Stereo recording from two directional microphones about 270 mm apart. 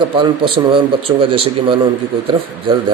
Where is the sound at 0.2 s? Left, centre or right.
Centre.